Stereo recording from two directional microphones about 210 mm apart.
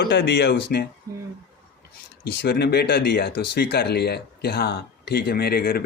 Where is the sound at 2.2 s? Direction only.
50° left (ahead or behind).